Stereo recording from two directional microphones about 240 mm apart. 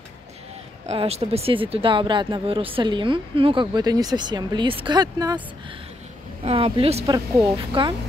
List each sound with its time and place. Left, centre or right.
0.8 s speech: right
6.4 s speech: right